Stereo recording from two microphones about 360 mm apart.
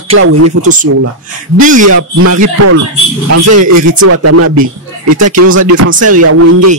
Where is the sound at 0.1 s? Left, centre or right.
Right.